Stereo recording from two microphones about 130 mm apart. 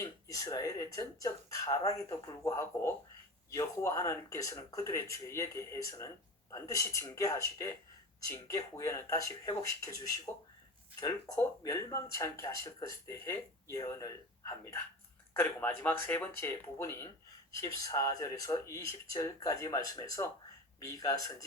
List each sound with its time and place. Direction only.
0.0 s speech: 25° left (ahead or behind)